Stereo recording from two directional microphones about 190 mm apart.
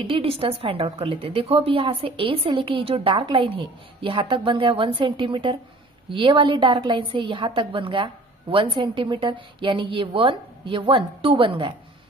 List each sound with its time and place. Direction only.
0.1 s a woman's voice: 30° right (ahead or behind)